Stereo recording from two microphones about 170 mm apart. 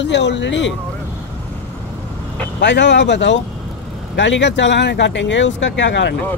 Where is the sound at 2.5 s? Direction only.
90° left.